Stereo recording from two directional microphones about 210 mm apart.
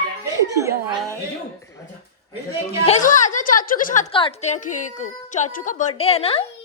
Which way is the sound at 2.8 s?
35° left (ahead or behind).